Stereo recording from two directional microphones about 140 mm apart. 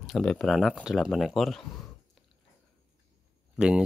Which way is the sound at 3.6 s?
5° right (ahead or behind).